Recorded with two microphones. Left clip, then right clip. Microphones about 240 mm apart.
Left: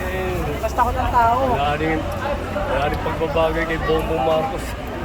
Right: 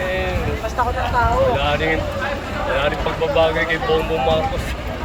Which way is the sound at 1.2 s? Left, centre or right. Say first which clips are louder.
Left 3 dB; left.